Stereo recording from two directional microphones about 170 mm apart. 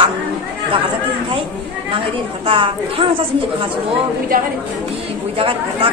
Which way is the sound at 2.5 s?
30° right (ahead or behind).